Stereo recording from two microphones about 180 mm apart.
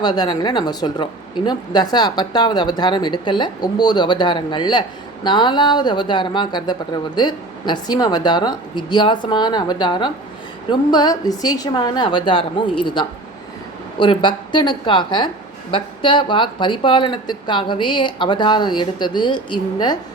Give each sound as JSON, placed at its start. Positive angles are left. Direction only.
{"t": 0.0, "sound": "speech", "side_deg": 25}